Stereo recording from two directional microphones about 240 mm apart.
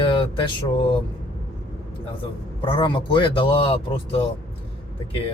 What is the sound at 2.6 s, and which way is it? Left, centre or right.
Speech, centre.